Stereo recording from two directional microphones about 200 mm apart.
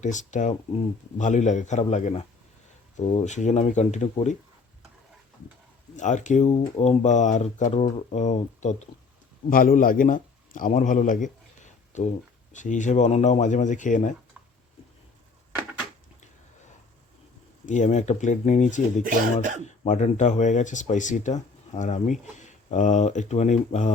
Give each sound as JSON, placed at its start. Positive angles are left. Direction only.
{"t": 0.0, "sound": "speech", "side_deg": 35}
{"t": 6.0, "sound": "speech", "side_deg": 35}
{"t": 17.7, "sound": "speech", "side_deg": 35}